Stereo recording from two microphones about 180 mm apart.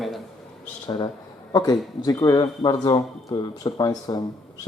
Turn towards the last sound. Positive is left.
turn(degrees=20)  # may be behind; listen again after turning